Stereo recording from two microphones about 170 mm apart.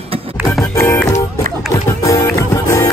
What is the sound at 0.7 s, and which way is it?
Music, 15° left (ahead or behind).